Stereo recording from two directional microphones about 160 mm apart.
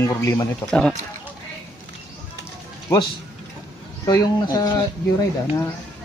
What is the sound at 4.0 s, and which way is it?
Speech, 20° left (ahead or behind).